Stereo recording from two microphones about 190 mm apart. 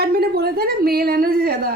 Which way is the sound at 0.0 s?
55° right (ahead or behind).